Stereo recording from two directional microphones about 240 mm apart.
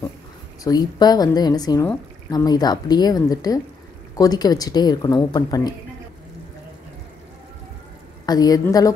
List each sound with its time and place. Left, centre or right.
0.7 s speech: centre
8.3 s speech: centre